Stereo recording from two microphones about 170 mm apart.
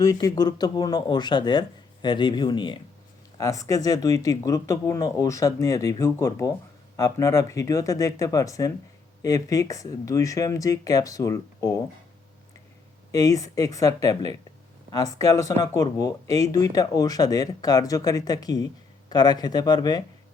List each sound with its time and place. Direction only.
0.0 s speech: 20° left (ahead or behind)
13.1 s speech: 20° left (ahead or behind)